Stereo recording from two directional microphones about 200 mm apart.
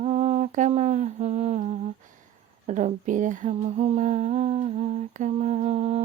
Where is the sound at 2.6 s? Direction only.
35° right (ahead or behind).